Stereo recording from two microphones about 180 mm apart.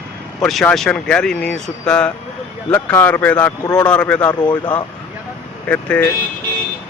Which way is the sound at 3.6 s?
20° left (ahead or behind).